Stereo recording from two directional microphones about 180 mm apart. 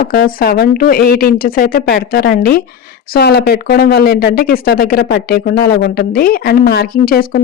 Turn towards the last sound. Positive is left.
turn(degrees=55)  # may be behind; listen again after turning